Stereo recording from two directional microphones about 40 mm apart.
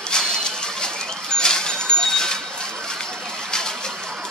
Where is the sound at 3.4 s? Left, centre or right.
Centre.